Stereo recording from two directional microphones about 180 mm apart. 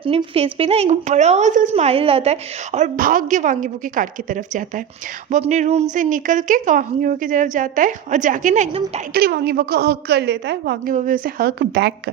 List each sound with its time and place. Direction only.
0.0 s a woman's voice: 30° right (ahead or behind)
9.1 s a woman's voice: 60° right (ahead or behind)
10.9 s a woman's voice: 50° right (ahead or behind); by 12.1 s 70° right (ahead or behind)